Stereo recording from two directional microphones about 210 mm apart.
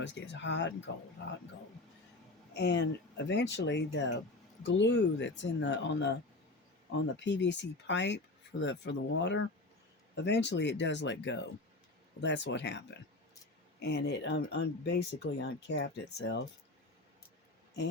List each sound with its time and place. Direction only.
0.0 s speech: 55° left (ahead or behind)
2.5 s speech: 55° left (ahead or behind)
7.2 s speech: 55° left (ahead or behind)